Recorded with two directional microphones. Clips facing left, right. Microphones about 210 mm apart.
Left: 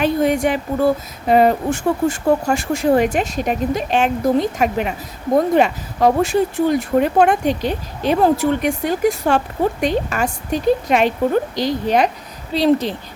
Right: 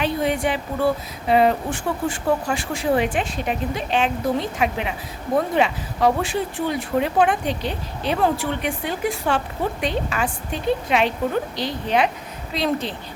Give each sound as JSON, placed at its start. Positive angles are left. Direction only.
{"t": 0.0, "sound": "a woman's voice", "side_deg": 45}